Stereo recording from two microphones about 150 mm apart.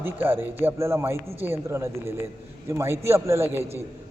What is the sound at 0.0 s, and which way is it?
A man's voice, 15° right (ahead or behind).